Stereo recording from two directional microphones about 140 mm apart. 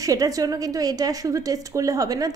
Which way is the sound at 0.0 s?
25° right (ahead or behind).